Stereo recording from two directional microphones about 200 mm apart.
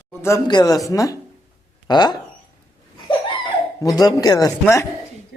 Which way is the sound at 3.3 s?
20° left (ahead or behind).